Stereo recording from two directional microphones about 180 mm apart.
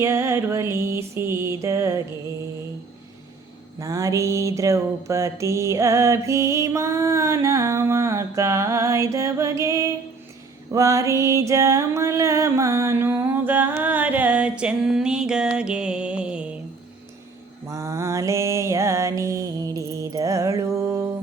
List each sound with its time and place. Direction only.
0.0 s mantra: 15° right (ahead or behind)
3.8 s mantra: 20° right (ahead or behind)
10.7 s music: 20° right (ahead or behind)
17.7 s mantra: 15° right (ahead or behind)